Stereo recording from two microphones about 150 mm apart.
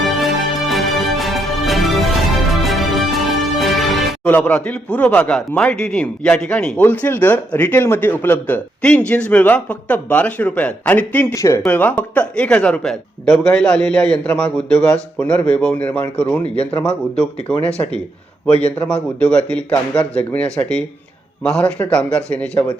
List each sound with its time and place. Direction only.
0.0 s music: centre (ahead or behind)
4.3 s speech: 10° left (ahead or behind)
17.7 s speech: 45° left (ahead or behind)
18.8 s speech: 5° left (ahead or behind)